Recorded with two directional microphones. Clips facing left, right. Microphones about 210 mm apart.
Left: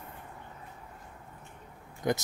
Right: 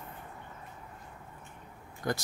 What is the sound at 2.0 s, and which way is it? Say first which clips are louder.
Speech: left 4 dB; 20° left (ahead or behind).